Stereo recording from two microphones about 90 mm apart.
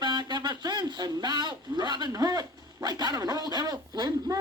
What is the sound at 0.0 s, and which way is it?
Radio, 55° right (ahead or behind).